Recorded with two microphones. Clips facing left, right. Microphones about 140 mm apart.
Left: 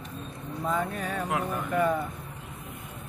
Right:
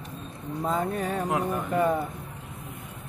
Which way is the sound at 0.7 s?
30° right (ahead or behind).